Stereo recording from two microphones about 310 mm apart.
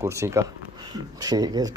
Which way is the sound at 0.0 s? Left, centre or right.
Centre.